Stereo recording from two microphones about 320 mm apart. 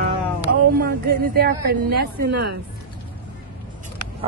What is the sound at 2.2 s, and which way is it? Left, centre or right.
Speech, right.